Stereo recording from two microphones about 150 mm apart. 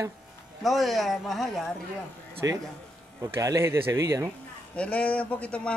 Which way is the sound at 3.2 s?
20° right (ahead or behind).